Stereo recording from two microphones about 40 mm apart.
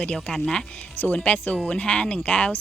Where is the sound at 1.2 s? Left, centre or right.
Left.